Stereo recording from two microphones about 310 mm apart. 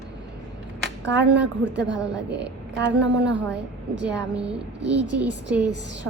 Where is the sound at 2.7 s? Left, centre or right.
Right.